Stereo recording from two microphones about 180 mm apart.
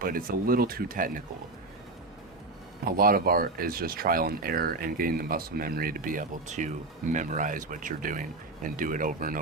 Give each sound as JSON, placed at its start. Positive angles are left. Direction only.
{"t": 0.0, "sound": "speech", "side_deg": -50}
{"t": 3.0, "sound": "speech", "side_deg": -55}